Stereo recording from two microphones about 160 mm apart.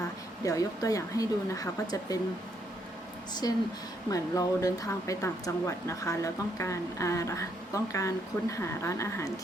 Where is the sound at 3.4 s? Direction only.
25° left (ahead or behind).